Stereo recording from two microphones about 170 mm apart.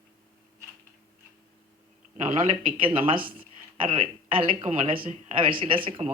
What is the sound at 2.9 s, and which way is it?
Speech, 30° right (ahead or behind).